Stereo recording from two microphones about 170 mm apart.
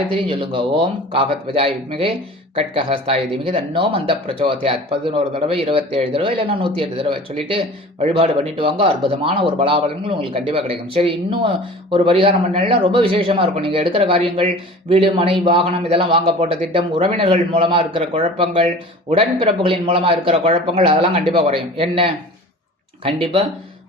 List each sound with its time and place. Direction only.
0.1 s speech: 30° right (ahead or behind)
3.3 s speech: 30° right (ahead or behind)
23.0 s speech: 30° right (ahead or behind)